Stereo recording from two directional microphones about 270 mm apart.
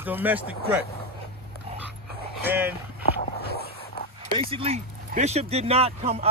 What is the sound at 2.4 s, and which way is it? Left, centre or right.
Speech, centre.